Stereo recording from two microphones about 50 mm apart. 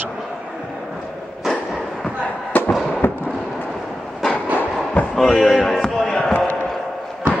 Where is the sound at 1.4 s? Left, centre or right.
Centre.